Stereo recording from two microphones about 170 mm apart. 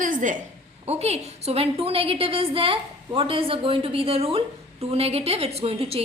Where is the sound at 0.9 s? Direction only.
40° right (ahead or behind).